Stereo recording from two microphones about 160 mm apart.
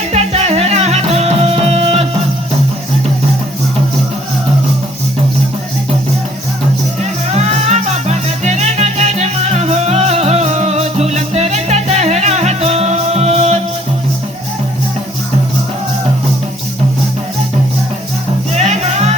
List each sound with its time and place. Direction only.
0.1 s music: 40° right (ahead or behind)
7.0 s music: 45° right (ahead or behind)
18.5 s music: 45° right (ahead or behind)